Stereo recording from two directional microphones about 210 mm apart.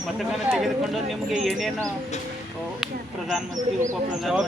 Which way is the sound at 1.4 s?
Centre (ahead or behind).